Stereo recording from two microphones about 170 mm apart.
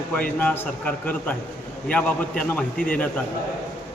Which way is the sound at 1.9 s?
5° left (ahead or behind).